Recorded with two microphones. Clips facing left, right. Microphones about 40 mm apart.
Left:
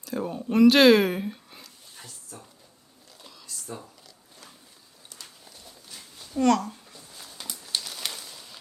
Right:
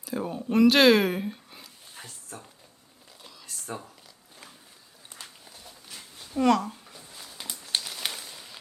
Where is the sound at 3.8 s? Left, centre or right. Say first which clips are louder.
Even; centre.